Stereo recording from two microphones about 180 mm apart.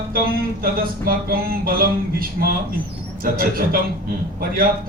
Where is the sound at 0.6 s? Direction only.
55° right (ahead or behind).